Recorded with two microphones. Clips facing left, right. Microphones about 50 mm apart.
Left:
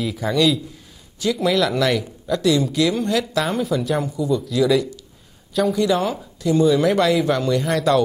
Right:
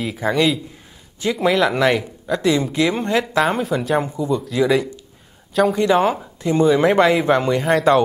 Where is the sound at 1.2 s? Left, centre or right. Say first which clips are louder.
Right 2 dB; right.